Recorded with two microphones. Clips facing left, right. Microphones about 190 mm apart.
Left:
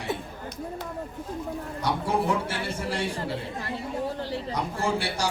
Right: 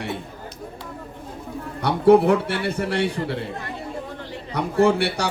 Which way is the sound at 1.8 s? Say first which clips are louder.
Right 12 dB; 65° right (ahead or behind).